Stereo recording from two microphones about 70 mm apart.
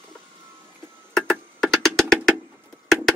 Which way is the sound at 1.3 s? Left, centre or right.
Centre.